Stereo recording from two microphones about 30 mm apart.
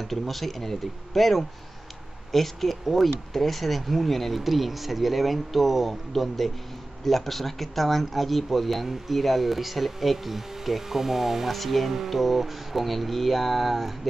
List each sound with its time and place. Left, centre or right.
0.0 s speech: centre
11.5 s speech: centre